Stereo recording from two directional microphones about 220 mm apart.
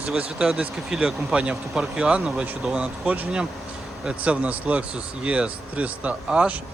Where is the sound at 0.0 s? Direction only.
5° right (ahead or behind).